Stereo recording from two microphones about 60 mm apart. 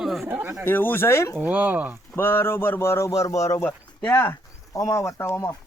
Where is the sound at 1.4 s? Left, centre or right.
Right.